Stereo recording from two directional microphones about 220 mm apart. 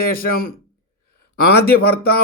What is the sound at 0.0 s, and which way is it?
Speech, 40° left (ahead or behind).